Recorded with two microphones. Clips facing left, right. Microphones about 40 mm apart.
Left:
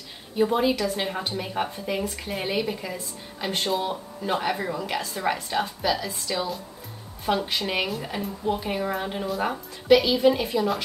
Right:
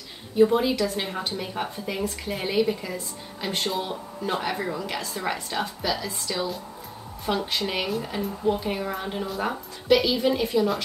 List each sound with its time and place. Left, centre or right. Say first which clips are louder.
0.4 s a woman's voice: right 2 dB; centre